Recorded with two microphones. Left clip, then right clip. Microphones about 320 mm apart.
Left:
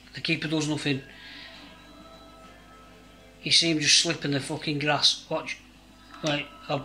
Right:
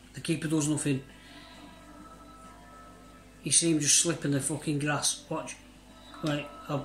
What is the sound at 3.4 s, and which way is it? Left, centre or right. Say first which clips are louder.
Speech: left 6 dB; centre.